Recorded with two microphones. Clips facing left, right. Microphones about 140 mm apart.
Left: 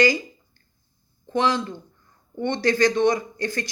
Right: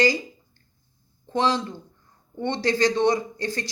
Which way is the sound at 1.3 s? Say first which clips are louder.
Left 1 dB; 25° right (ahead or behind).